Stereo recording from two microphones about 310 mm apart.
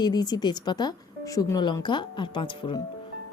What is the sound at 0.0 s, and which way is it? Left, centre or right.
Speech, centre.